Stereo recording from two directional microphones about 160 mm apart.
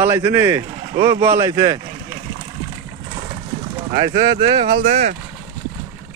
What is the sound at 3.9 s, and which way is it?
Speech, 30° right (ahead or behind).